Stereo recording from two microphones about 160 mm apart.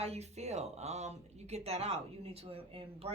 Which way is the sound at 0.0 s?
40° right (ahead or behind).